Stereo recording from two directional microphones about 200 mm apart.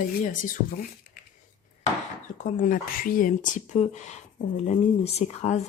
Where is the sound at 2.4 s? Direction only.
40° left (ahead or behind).